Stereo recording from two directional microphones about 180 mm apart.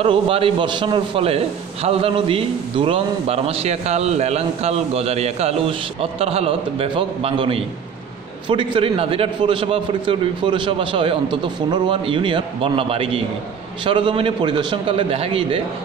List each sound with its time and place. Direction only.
0.0 s a man's voice: 30° right (ahead or behind)